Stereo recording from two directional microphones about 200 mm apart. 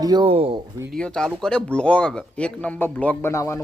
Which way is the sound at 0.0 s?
20° right (ahead or behind).